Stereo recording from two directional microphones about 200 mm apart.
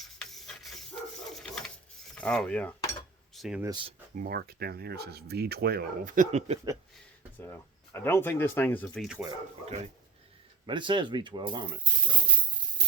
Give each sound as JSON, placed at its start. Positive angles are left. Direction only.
{"t": 0.0, "sound": "a sound", "side_deg": 0}
{"t": 1.4, "sound": "mechanisms", "side_deg": 5}
{"t": 2.1, "sound": "cutlery", "side_deg": 5}
{"t": 3.3, "sound": "speech", "side_deg": 0}
{"t": 3.6, "sound": "speech", "side_deg": -20}
{"t": 4.1, "sound": "speech", "side_deg": -45}
{"t": 7.9, "sound": "speech", "side_deg": 10}
{"t": 9.0, "sound": "speech", "side_deg": -10}
{"t": 10.7, "sound": "speech", "side_deg": -25}